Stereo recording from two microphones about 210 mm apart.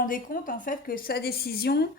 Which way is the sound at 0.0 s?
40° left (ahead or behind).